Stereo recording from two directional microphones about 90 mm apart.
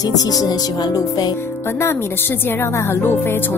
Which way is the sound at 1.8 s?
25° left (ahead or behind).